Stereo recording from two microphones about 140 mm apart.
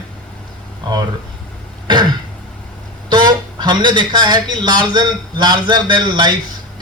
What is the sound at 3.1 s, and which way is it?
Speech, 30° right (ahead or behind).